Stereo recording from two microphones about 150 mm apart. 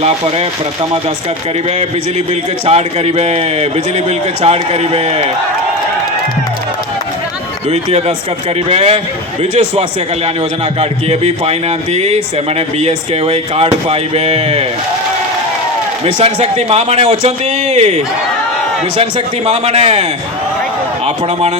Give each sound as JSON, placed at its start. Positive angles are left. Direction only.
{"t": 1.8, "sound": "speech", "side_deg": -45}
{"t": 7.7, "sound": "speech", "side_deg": -45}
{"t": 10.8, "sound": "speech", "side_deg": -45}
{"t": 16.0, "sound": "a man's voice", "side_deg": -40}